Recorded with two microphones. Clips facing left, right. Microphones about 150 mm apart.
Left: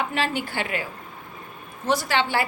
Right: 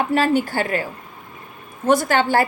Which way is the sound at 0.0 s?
45° right (ahead or behind).